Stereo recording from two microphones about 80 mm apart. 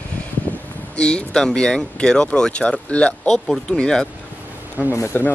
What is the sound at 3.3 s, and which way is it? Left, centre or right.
Speech, centre.